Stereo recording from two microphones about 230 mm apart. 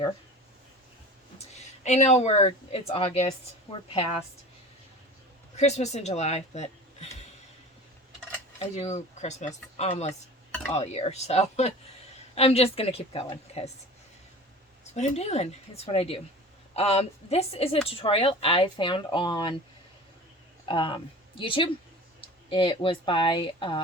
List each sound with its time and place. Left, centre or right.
1.4 s speech: left
5.5 s speech: left
8.5 s speech: left
14.9 s speech: left
20.7 s speech: left